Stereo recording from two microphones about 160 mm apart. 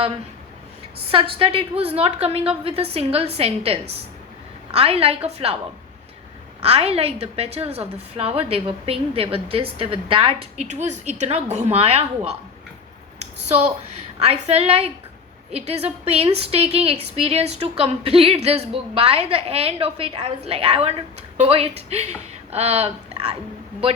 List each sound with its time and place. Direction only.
1.4 s a woman's voice: 35° right (ahead or behind)
6.6 s a woman's voice: 40° right (ahead or behind)
10.7 s a woman's voice: 45° right (ahead or behind)
13.5 s a woman's voice: 45° right (ahead or behind)